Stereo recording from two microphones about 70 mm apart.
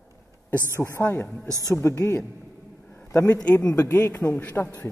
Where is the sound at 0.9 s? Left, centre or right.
Left.